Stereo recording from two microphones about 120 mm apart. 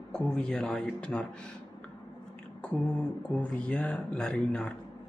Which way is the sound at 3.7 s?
10° left (ahead or behind).